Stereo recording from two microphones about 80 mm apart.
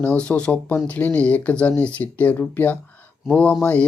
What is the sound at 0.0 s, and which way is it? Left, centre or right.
Speech, centre.